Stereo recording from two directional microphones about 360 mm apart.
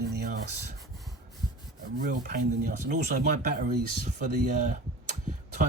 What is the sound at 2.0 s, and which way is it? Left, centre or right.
Speech, right.